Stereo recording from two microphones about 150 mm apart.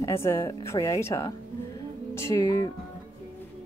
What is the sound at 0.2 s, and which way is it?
Speech, 15° left (ahead or behind).